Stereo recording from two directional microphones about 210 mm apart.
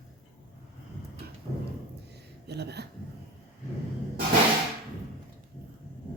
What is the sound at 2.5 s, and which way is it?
Speech, 50° right (ahead or behind).